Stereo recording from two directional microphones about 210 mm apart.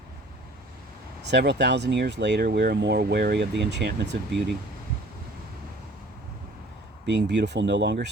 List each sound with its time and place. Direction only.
1.2 s speech: 55° right (ahead or behind)
7.0 s speech: 55° right (ahead or behind)